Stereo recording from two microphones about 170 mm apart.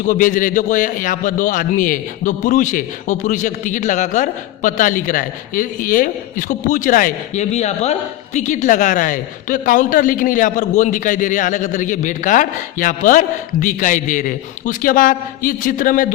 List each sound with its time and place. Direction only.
0.0 s a man's voice: 50° left (ahead or behind)